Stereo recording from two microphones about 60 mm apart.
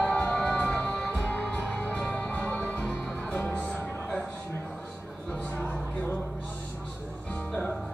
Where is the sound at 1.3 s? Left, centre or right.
Left.